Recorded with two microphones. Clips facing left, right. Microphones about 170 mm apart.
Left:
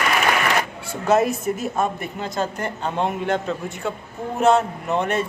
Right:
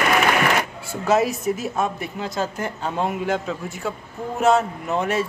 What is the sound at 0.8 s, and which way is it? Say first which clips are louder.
A woman's voice: left 1 dB; centre (ahead or behind).